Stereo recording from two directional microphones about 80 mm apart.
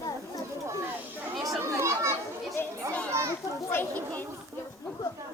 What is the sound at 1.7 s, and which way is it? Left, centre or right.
Children playing, right.